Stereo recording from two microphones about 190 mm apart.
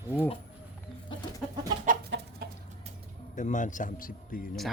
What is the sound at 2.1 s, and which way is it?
Chicken, 75° right (ahead or behind).